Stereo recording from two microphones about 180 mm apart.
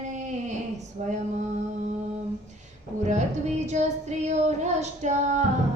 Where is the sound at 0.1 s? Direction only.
40° right (ahead or behind).